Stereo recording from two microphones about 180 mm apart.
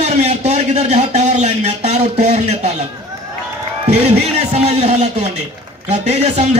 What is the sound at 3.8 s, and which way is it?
A man's voice, 35° right (ahead or behind).